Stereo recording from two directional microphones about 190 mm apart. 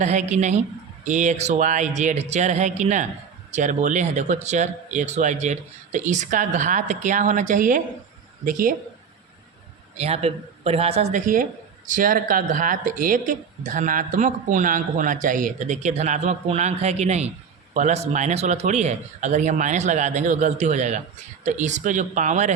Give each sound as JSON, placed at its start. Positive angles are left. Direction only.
{"t": 0.0, "sound": "speech", "side_deg": -35}
{"t": 10.0, "sound": "speech", "side_deg": -35}